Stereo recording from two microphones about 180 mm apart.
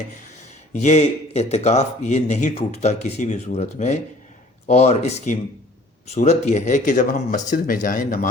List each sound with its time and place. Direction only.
0.8 s a man's voice: 40° left (ahead or behind)